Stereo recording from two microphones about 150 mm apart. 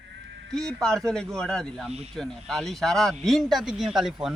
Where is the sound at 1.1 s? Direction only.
5° left (ahead or behind).